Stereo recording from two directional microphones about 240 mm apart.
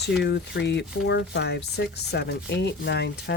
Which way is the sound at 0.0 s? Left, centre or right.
Left.